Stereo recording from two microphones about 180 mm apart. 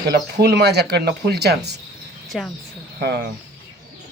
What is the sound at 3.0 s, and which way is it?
Speech, 65° right (ahead or behind).